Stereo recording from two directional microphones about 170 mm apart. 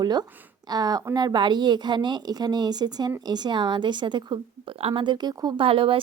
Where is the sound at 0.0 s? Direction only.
25° right (ahead or behind).